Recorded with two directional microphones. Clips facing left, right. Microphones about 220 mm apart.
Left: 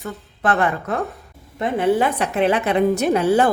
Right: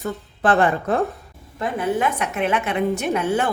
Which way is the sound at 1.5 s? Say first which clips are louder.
Left 4 dB; 25° left (ahead or behind).